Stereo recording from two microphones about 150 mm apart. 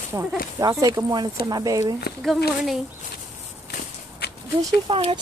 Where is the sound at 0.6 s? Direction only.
25° right (ahead or behind).